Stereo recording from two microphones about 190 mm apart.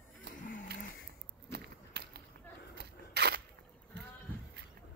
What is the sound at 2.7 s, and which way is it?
Single-lens reflex camera, 60° right (ahead or behind).